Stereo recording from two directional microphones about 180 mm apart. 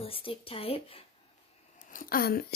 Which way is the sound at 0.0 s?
30° left (ahead or behind).